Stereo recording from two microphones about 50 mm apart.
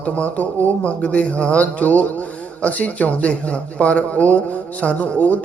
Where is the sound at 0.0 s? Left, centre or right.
Left.